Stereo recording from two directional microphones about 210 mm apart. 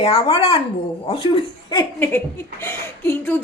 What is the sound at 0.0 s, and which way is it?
Speech, 25° left (ahead or behind).